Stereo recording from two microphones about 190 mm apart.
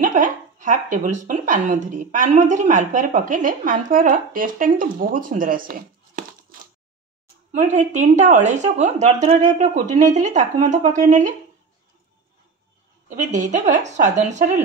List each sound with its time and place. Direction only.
0.0 s a woman's voice: 40° right (ahead or behind)
13.1 s a woman's voice: 40° right (ahead or behind)